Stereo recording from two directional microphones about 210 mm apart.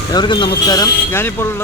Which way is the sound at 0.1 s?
20° left (ahead or behind).